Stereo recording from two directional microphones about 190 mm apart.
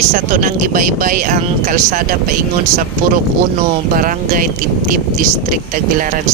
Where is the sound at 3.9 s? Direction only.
45° right (ahead or behind).